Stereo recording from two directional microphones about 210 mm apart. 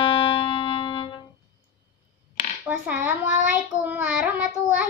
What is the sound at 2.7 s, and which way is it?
Child singing, 10° right (ahead or behind).